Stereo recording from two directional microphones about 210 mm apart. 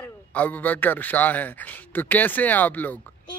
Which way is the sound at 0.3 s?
5° left (ahead or behind).